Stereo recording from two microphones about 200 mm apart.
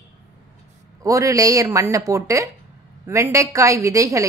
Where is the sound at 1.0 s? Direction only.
15° right (ahead or behind).